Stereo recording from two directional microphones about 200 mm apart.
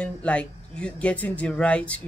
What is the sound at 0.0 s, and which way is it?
Speech, 5° left (ahead or behind).